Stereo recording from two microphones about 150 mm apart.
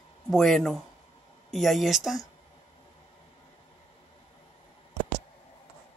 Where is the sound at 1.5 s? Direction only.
Centre (ahead or behind).